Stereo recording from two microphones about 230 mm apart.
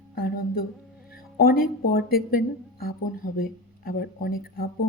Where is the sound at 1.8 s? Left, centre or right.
Left.